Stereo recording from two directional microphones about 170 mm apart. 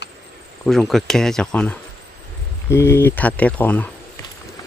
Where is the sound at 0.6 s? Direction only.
Centre (ahead or behind).